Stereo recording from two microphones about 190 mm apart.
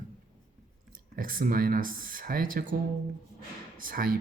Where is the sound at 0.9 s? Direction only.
45° right (ahead or behind).